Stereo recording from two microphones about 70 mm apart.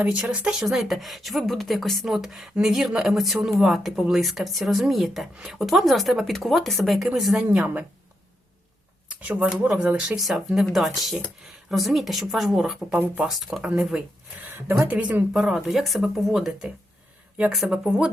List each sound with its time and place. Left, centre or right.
0.0 s speech: centre
7.6 s speech: right
9.0 s speech: right
10.2 s speech: centre
12.9 s speech: right
13.2 s speech: centre
13.6 s speech: centre
14.8 s speech: right
15.3 s speech: centre
16.5 s speech: centre